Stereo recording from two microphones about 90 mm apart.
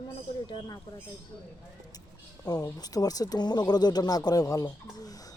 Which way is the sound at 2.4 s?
45° left (ahead or behind).